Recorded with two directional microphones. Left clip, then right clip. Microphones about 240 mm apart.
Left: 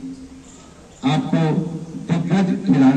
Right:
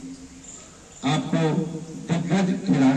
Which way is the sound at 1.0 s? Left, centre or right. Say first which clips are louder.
Left 3 dB; centre.